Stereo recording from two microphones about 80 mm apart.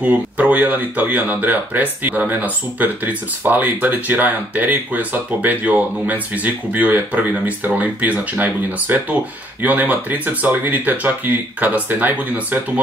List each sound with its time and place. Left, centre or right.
0.0 s speech: centre